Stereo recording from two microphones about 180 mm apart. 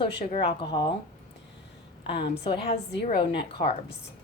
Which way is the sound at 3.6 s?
45° left (ahead or behind).